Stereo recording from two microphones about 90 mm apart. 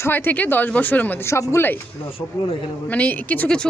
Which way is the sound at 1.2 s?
30° left (ahead or behind).